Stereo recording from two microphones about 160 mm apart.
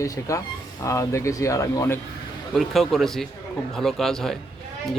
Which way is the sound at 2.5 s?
Centre (ahead or behind).